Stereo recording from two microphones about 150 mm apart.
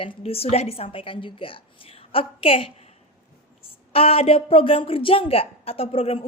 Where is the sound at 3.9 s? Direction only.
40° left (ahead or behind).